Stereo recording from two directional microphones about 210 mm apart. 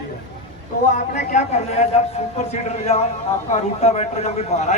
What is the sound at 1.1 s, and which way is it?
Speech, 35° left (ahead or behind).